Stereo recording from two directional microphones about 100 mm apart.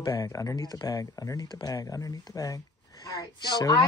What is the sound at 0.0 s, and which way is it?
Speech, 40° left (ahead or behind).